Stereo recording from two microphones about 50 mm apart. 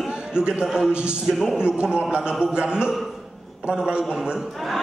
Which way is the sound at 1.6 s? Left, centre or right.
Centre.